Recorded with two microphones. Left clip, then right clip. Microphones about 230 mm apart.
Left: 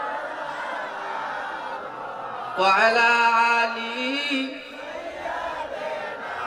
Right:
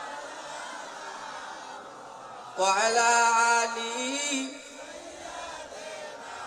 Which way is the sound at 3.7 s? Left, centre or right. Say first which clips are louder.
Left 4 dB; right.